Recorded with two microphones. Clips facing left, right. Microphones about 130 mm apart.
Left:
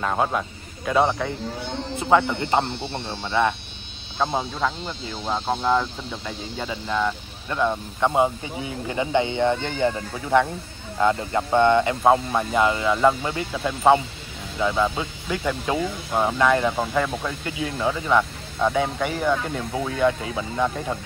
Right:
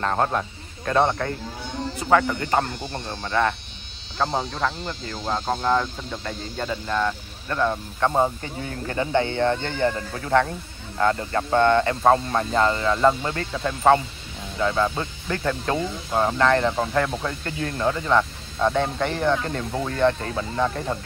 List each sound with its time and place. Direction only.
0.0 s speech: 5° left (ahead or behind)
2.0 s speech: 20° left (ahead or behind)
2.6 s speech: 45° right (ahead or behind)
3.3 s speech: 15° left (ahead or behind)
12.0 s speech: 5° left (ahead or behind)